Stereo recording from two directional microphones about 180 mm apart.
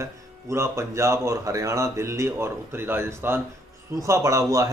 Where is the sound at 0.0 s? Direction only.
15° right (ahead or behind).